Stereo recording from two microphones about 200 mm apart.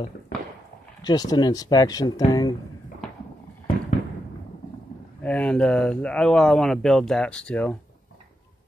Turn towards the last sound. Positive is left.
turn(degrees=5)  # may be behind; listen again after turning